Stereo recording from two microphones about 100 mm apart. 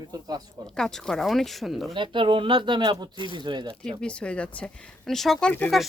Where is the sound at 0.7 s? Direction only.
5° left (ahead or behind).